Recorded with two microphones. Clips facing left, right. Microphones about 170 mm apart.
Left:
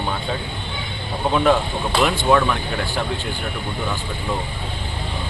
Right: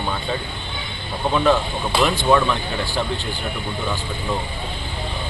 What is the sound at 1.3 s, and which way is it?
Speech, 10° left (ahead or behind).